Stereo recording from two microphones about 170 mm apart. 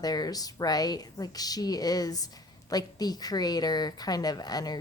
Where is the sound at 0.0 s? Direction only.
25° left (ahead or behind).